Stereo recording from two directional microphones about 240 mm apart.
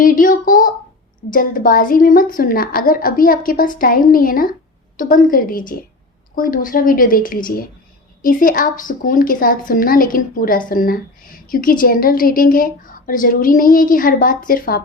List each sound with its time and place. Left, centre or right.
0.0 s a woman's voice: left